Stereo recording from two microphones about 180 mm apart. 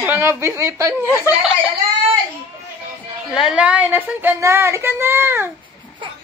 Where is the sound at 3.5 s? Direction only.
5° right (ahead or behind).